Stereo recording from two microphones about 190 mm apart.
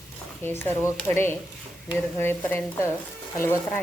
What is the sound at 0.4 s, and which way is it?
Speech, 10° left (ahead or behind).